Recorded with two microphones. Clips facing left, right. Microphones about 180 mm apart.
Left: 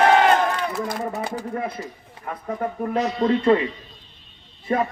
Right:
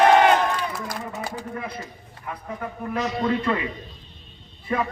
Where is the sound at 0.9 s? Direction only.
25° left (ahead or behind).